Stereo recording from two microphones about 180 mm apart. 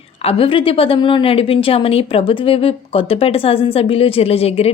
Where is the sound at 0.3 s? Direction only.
30° left (ahead or behind).